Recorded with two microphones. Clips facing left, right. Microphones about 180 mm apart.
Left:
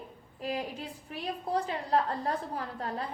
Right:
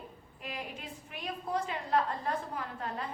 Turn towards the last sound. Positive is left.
turn(degrees=35)  # may be behind; listen again after turning